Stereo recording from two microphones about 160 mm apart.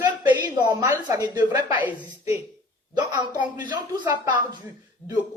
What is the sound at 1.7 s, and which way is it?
Speech, 10° right (ahead or behind).